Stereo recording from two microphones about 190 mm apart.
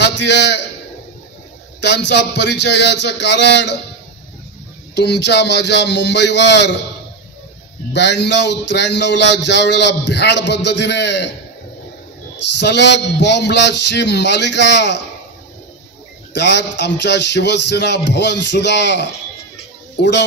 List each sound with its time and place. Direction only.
0.0 s a man's voice: 65° left (ahead or behind)
1.8 s a man's voice: 65° left (ahead or behind)
4.9 s a man's voice: 65° left (ahead or behind)
7.9 s a man's voice: 65° left (ahead or behind)
12.5 s a man's voice: 65° left (ahead or behind)
16.3 s a man's voice: 65° left (ahead or behind)